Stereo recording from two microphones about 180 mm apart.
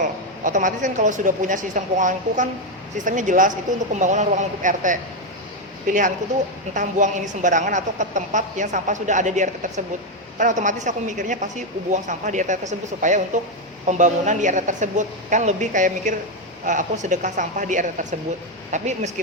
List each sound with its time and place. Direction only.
0.0 s a woman's voice: 45° right (ahead or behind)
6.7 s a woman's voice: 45° right (ahead or behind)